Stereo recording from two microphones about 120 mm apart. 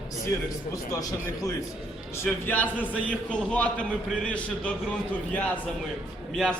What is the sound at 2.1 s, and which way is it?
A man's voice, 15° left (ahead or behind).